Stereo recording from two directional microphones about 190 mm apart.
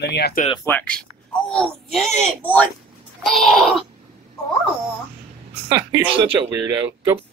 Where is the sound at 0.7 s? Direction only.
10° left (ahead or behind).